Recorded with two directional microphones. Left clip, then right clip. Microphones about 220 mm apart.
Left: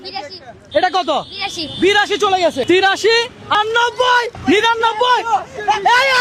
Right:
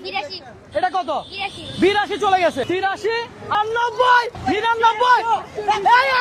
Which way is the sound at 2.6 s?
35° left (ahead or behind).